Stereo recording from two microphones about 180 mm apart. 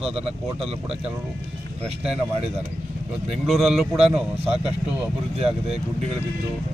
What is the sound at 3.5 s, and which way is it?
Speech, centre (ahead or behind).